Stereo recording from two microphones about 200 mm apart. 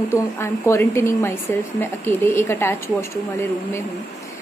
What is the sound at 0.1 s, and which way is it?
A woman's voice, 15° left (ahead or behind).